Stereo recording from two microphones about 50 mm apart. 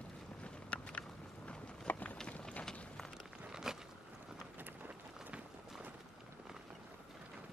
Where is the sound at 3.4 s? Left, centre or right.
Centre.